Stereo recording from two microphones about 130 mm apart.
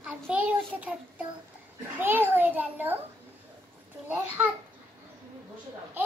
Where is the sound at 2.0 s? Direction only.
15° right (ahead or behind).